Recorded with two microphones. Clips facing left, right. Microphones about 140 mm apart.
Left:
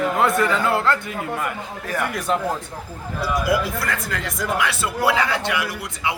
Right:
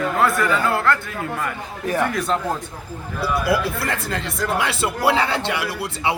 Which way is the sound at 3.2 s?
30° right (ahead or behind).